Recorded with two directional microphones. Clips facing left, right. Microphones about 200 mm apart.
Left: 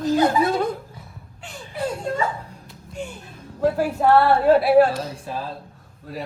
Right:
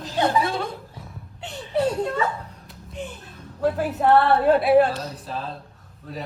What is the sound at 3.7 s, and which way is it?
A woman's voice, centre (ahead or behind).